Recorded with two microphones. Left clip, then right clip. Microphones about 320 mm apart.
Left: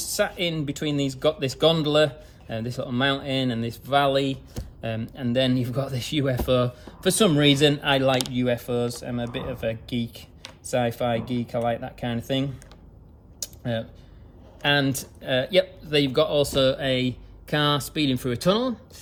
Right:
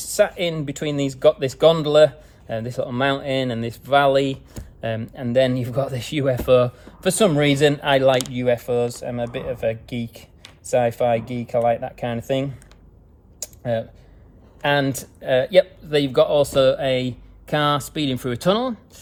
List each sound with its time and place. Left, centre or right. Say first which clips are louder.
0.0 s speech: right 6 dB; centre
13.4 s computer keyboard: right 6 dB; centre
14.6 s speech: right 2 dB; right